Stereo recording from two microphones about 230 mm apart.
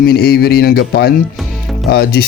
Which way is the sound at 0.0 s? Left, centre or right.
Left.